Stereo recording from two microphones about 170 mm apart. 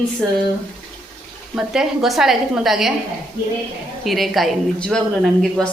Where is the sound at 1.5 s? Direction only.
5° right (ahead or behind).